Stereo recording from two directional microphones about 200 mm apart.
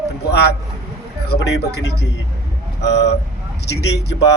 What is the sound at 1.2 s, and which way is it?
Speech, 60° left (ahead or behind).